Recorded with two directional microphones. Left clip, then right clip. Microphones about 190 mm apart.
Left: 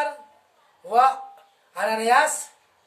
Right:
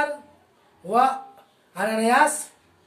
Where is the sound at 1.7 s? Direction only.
15° left (ahead or behind).